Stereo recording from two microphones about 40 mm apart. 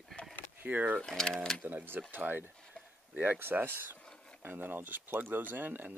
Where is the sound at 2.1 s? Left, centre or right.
Right.